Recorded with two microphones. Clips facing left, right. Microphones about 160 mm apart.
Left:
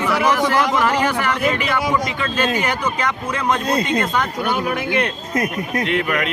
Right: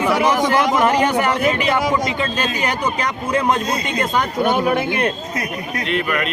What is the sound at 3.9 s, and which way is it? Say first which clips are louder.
A man's voice: right 1 dB; 25° right (ahead or behind).